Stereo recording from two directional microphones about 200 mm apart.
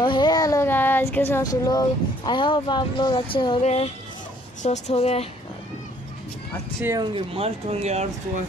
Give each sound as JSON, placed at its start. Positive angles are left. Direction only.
{"t": 0.0, "sound": "child singing", "side_deg": 20}
{"t": 4.6, "sound": "speech", "side_deg": 30}
{"t": 6.8, "sound": "speech", "side_deg": -15}
{"t": 7.2, "sound": "speech", "side_deg": -30}